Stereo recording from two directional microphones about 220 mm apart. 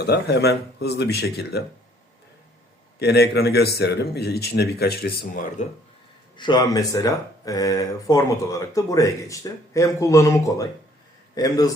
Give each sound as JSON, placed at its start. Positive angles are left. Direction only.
{"t": 0.0, "sound": "speech", "side_deg": 45}
{"t": 3.0, "sound": "speech", "side_deg": 45}
{"t": 6.3, "sound": "speech", "side_deg": 20}